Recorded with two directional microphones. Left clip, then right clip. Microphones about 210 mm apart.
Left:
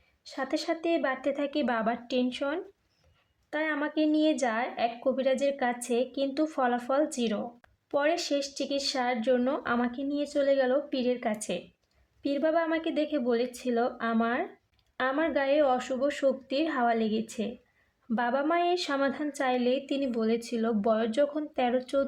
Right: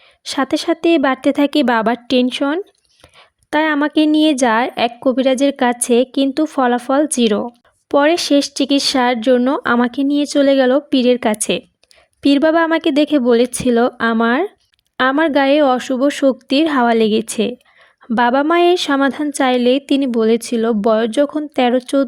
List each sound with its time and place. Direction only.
0.3 s a woman's voice: 45° right (ahead or behind)